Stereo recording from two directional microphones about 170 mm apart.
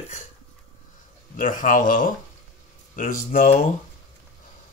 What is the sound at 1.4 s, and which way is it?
Speech, 50° left (ahead or behind).